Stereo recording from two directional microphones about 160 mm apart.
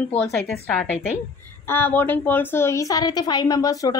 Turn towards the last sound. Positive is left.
turn(degrees=20)  # may be behind; listen again after turning